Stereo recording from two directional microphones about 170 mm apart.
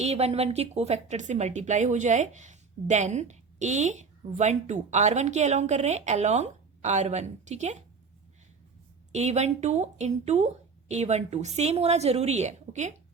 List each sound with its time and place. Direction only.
0.0 s a woman's voice: 40° right (ahead or behind)
9.1 s speech: 40° right (ahead or behind)